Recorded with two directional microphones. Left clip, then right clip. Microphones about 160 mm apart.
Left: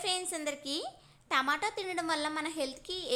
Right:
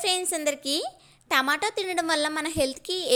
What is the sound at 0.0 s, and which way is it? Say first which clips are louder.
A woman's voice: right 8 dB; 35° right (ahead or behind).